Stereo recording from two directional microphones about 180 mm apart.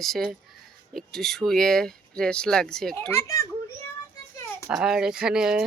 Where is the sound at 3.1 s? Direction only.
15° left (ahead or behind).